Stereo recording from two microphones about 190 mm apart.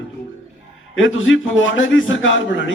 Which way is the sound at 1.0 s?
90° left.